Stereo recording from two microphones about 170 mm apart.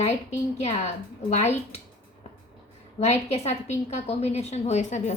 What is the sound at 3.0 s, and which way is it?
A woman's voice, 40° left (ahead or behind).